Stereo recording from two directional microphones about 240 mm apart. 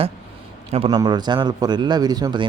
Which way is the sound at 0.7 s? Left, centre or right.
Right.